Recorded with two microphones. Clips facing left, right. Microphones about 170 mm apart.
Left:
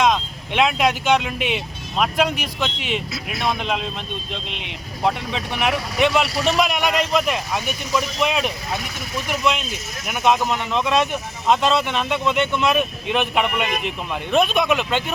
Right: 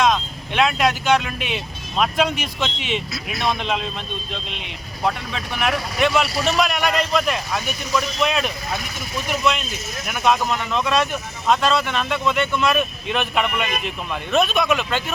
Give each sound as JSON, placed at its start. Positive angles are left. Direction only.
{"t": 0.0, "sound": "speech", "side_deg": 15}